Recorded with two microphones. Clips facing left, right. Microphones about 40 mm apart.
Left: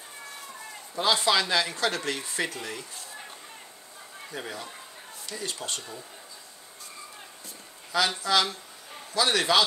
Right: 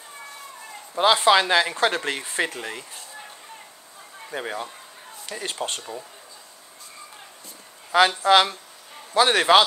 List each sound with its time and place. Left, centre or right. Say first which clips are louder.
0.9 s speech: right 7 dB; right
4.3 s speech: right 7 dB; right
5.8 s speech: right 5 dB; right
8.2 s speech: right 8 dB; right